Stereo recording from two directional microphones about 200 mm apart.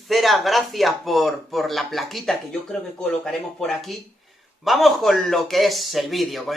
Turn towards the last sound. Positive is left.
turn(degrees=0)  # may be behind; listen again after turning